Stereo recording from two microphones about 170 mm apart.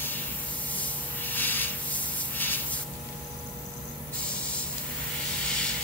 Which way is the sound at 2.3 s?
10° left (ahead or behind).